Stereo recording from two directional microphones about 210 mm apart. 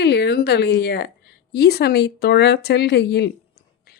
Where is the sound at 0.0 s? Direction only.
55° left (ahead or behind).